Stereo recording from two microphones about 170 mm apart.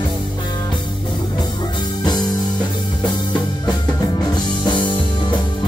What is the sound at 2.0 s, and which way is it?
Music, 25° left (ahead or behind).